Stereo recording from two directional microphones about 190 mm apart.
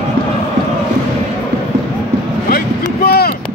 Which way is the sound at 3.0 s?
55° left (ahead or behind).